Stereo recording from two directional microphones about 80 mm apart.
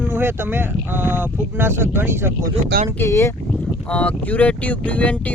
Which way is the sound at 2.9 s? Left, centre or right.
Left.